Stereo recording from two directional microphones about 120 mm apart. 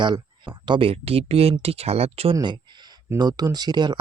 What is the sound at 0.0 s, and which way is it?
Speech, 40° right (ahead or behind).